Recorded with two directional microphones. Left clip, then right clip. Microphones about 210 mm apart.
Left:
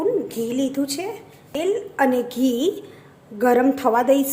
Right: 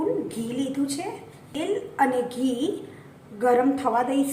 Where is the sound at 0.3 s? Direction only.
45° left (ahead or behind).